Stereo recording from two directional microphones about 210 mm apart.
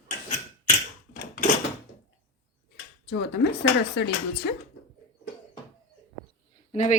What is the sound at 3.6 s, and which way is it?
Speech, 55° left (ahead or behind).